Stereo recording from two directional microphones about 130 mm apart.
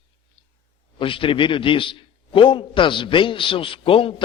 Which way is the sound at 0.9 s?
40° left (ahead or behind).